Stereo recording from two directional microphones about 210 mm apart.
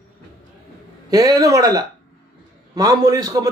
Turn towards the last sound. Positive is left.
turn(degrees=-15)  # may be behind; listen again after turning